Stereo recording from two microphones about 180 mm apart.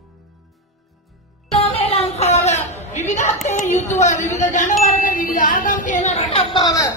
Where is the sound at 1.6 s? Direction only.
30° left (ahead or behind).